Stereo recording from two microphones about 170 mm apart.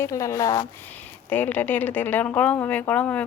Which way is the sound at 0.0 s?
15° left (ahead or behind).